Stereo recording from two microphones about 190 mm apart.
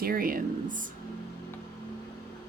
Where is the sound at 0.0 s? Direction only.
50° right (ahead or behind).